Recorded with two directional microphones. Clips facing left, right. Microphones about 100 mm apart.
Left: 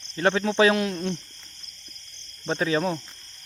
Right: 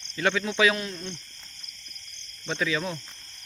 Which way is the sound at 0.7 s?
60° left (ahead or behind).